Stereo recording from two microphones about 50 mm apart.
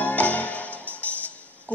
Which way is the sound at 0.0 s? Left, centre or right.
Left.